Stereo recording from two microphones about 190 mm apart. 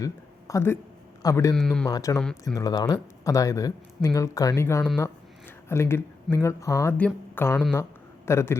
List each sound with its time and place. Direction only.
0.0 s speech: 15° left (ahead or behind)
1.5 s speech: centre (ahead or behind)
1.9 s speech: 15° left (ahead or behind)
2.1 s speech: 5° left (ahead or behind)
2.6 s speech: 20° left (ahead or behind)